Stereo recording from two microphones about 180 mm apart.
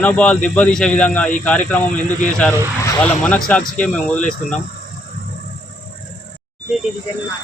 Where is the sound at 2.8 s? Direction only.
10° left (ahead or behind).